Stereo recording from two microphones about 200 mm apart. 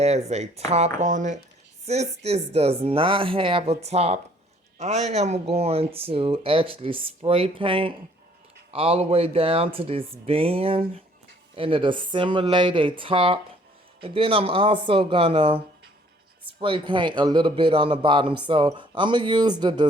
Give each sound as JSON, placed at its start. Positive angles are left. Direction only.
{"t": 0.0, "sound": "speech", "side_deg": -35}